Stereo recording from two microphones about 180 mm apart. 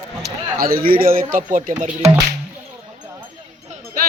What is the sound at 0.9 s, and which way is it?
Speech, 55° right (ahead or behind).